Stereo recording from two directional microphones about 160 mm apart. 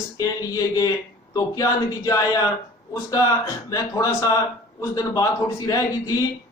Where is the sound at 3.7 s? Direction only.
20° left (ahead or behind).